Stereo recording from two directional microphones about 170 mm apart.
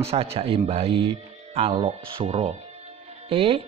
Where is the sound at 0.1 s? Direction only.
35° right (ahead or behind).